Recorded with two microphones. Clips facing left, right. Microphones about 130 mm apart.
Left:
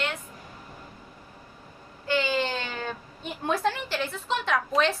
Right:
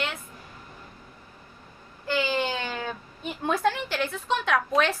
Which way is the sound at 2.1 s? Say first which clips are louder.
Even; 5° right (ahead or behind).